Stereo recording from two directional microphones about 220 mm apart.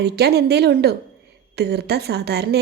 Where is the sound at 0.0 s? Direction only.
50° right (ahead or behind).